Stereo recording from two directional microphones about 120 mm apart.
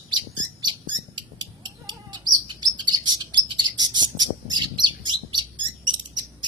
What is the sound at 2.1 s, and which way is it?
Bird, 40° right (ahead or behind).